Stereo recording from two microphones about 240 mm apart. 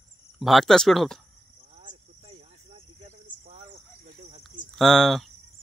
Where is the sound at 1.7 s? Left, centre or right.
Right.